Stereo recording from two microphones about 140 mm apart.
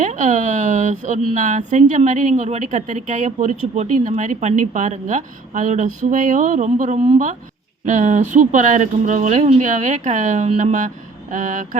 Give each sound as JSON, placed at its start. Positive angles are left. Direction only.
{"t": 0.0, "sound": "speech", "side_deg": -60}